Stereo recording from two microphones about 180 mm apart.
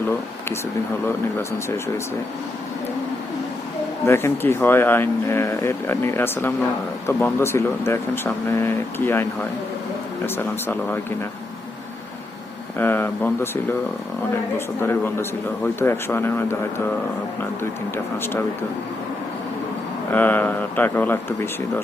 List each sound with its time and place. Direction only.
1.0 s speech: 15° left (ahead or behind)
4.0 s speech: 15° left (ahead or behind)
10.2 s speech: 10° left (ahead or behind)
12.8 s speech: 10° left (ahead or behind)
14.8 s speech: 10° left (ahead or behind)
20.1 s speech: 10° left (ahead or behind)